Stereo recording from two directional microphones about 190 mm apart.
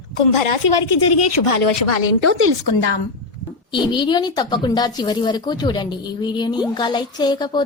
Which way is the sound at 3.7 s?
25° left (ahead or behind).